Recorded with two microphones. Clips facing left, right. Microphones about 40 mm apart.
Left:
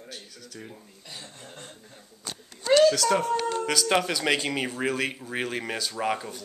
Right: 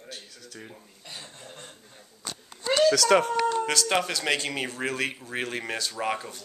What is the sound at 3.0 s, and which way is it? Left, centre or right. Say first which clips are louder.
Speech: right 3 dB; right.